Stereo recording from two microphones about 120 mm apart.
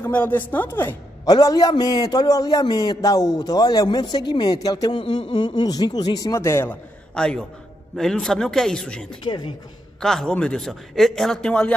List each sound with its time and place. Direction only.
0.0 s a woman's voice: 15° left (ahead or behind)
1.2 s a man's voice: 35° left (ahead or behind)
7.2 s a woman's voice: 5° left (ahead or behind)
9.2 s a man's voice: 40° left (ahead or behind)
10.0 s a man's voice: 5° left (ahead or behind)